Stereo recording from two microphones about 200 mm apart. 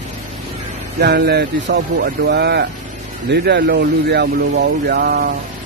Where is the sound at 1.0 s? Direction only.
55° right (ahead or behind).